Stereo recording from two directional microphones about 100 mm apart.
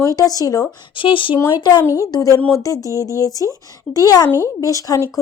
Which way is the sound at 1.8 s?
35° left (ahead or behind).